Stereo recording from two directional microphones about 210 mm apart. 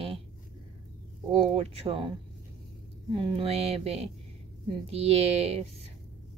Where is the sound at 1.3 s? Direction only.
25° right (ahead or behind).